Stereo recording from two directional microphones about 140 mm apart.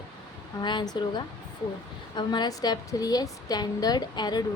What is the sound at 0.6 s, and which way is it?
A woman's voice, 30° left (ahead or behind).